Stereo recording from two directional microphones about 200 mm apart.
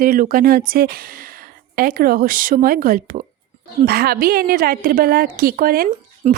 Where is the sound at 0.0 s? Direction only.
45° right (ahead or behind).